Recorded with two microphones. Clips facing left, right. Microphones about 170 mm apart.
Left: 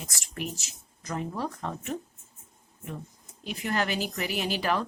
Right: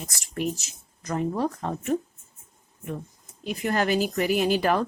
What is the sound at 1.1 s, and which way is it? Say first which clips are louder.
Speech: right 6 dB; 45° right (ahead or behind).